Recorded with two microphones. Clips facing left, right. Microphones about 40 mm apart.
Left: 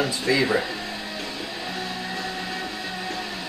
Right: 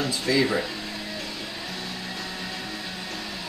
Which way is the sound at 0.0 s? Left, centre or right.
Left.